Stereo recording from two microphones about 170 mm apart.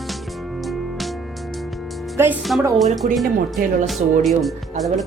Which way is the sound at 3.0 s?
50° right (ahead or behind).